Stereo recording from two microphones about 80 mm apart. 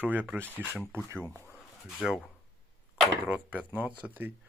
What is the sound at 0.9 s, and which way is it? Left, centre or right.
Speech, right.